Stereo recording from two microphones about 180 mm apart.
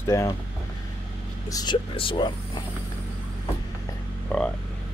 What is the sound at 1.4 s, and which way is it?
Speech, 20° left (ahead or behind).